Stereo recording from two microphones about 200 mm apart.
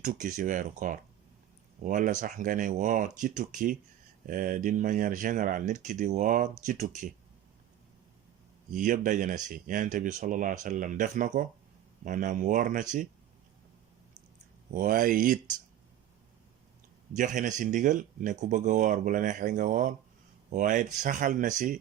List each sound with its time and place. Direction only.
0.0 s speech: 40° right (ahead or behind)
8.7 s speech: 40° right (ahead or behind)
14.7 s speech: 45° right (ahead or behind)
17.2 s speech: 40° right (ahead or behind)